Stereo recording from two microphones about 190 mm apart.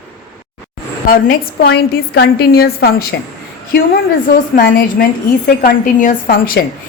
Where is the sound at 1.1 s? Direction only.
50° left (ahead or behind).